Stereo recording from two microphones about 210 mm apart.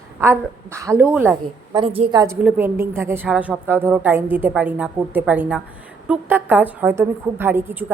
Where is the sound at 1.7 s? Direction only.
25° right (ahead or behind).